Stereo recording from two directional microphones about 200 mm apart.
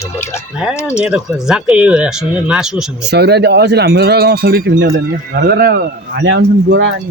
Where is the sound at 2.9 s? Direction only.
55° right (ahead or behind).